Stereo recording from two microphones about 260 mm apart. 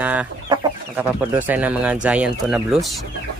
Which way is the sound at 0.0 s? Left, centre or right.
Centre.